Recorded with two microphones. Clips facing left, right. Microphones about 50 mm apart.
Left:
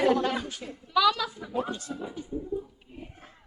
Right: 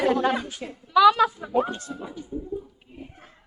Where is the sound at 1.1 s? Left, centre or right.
Right.